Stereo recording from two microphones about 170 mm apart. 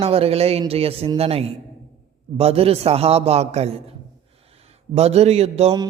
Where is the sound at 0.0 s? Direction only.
35° right (ahead or behind).